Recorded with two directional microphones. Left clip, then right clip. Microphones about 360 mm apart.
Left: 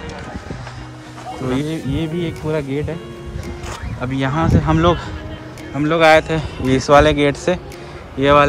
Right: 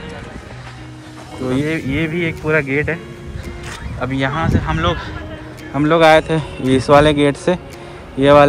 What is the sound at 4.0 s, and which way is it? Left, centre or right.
Speech, centre.